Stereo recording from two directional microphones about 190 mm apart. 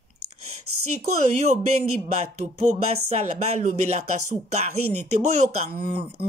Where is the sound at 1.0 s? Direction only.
35° right (ahead or behind).